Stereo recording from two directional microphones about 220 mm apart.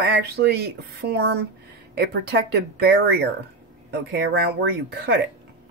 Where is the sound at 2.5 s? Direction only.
45° right (ahead or behind).